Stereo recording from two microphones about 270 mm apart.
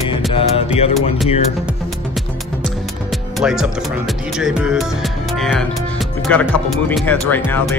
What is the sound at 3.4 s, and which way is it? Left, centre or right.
Speech, centre.